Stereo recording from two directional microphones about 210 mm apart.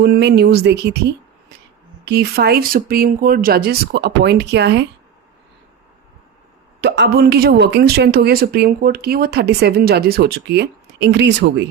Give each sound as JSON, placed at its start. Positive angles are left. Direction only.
{"t": 0.0, "sound": "speech", "side_deg": -55}
{"t": 6.8, "sound": "speech", "side_deg": -55}